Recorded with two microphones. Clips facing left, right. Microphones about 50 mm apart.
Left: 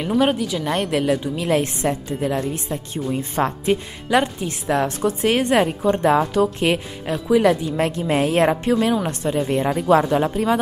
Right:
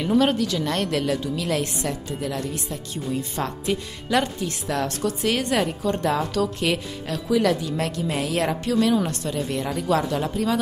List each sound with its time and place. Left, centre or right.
0.2 s a woman's voice: centre